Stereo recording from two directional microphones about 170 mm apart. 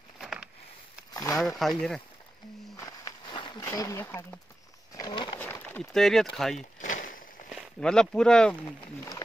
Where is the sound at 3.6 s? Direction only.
20° left (ahead or behind).